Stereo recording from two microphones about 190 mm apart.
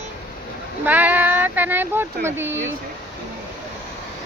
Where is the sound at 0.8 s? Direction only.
10° right (ahead or behind).